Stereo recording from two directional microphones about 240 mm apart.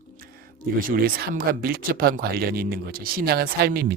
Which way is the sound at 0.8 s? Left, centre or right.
Right.